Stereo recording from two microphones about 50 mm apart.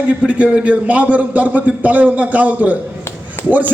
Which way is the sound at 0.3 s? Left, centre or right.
Right.